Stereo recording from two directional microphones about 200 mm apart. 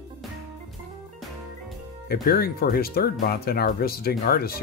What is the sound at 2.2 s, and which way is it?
Speech, 50° left (ahead or behind).